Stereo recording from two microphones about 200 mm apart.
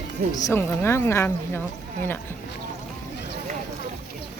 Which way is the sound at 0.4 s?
10° left (ahead or behind).